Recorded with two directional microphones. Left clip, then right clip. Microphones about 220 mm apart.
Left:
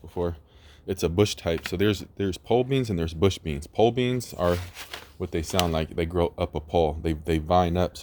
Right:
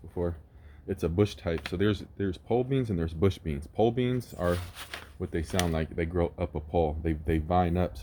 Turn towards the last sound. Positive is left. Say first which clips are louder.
# left 5 dB
turn(degrees=30)  # may be behind; listen again after turning